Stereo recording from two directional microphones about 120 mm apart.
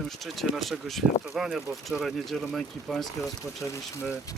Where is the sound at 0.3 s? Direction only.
Centre (ahead or behind).